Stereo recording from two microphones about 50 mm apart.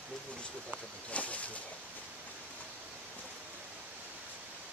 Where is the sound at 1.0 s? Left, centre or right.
Left.